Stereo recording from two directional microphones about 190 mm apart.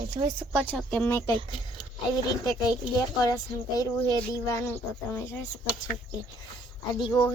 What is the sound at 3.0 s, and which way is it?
Speech, 20° left (ahead or behind).